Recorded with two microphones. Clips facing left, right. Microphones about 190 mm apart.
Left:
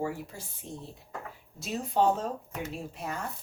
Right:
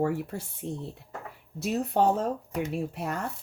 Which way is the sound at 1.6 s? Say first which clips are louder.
Right 3 dB; 60° right (ahead or behind).